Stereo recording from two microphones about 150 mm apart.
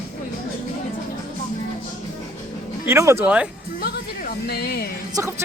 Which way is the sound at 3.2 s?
5° right (ahead or behind).